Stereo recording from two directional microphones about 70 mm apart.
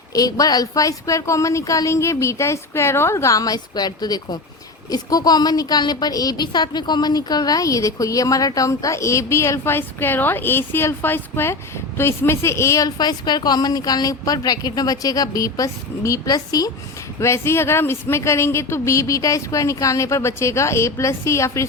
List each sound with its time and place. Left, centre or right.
0.1 s speech: left
3.4 s a woman's voice: left
13.0 s a woman's voice: left
17.2 s speech: left